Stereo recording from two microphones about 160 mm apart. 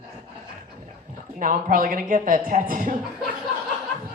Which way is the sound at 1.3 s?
55° right (ahead or behind).